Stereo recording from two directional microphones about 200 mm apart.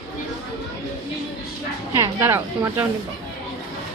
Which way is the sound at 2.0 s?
10° right (ahead or behind).